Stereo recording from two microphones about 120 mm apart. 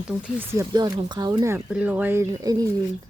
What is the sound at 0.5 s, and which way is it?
Speech, 30° right (ahead or behind).